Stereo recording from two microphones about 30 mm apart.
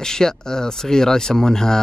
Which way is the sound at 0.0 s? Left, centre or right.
Left.